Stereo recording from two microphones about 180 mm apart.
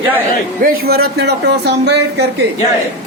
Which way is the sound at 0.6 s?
55° right (ahead or behind).